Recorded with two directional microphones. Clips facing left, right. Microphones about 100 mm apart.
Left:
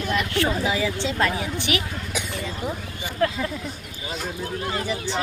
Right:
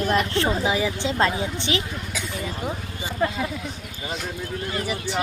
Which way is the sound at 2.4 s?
20° right (ahead or behind).